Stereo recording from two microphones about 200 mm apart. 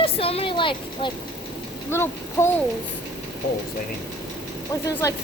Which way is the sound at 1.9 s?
10° left (ahead or behind).